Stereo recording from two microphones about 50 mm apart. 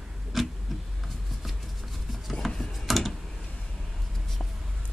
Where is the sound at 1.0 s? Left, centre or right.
Centre.